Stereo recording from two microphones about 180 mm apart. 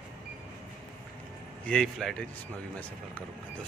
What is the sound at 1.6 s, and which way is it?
Speech, 5° left (ahead or behind).